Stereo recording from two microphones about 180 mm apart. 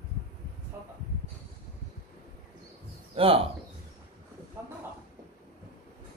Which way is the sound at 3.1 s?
30° right (ahead or behind).